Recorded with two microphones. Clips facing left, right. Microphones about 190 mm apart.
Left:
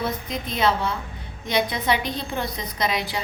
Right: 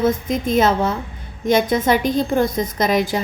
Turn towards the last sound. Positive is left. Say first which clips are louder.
# right 8 dB
turn(degrees=-45)  # may be behind; listen again after turning